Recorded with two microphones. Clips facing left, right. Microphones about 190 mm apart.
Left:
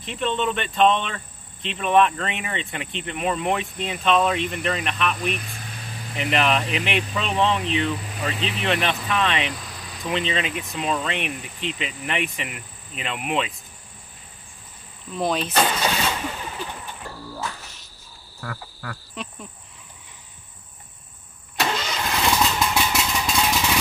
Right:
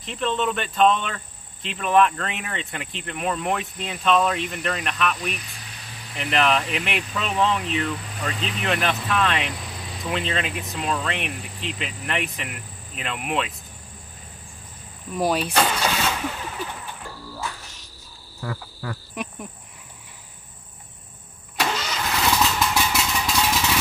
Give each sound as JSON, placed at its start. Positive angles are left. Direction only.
{"t": 0.0, "sound": "speech", "side_deg": 0}
{"t": 15.1, "sound": "speech", "side_deg": -10}
{"t": 15.5, "sound": "vehicle", "side_deg": 10}
{"t": 18.4, "sound": "cricket", "side_deg": -25}
{"t": 21.5, "sound": "engine starting", "side_deg": -5}